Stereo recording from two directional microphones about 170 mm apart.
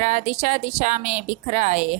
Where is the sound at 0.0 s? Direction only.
45° right (ahead or behind).